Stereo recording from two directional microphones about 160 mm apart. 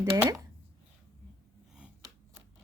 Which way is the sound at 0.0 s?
20° right (ahead or behind).